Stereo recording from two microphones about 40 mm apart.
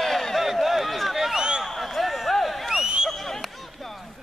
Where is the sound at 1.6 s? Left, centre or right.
Centre.